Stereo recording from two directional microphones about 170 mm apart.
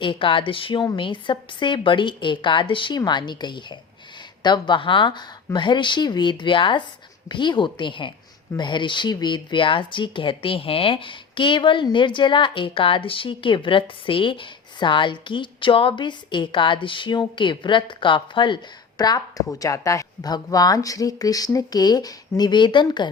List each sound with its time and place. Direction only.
0.0 s speech: 30° left (ahead or behind)